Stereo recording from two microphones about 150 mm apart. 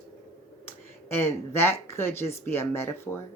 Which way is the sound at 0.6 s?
15° left (ahead or behind).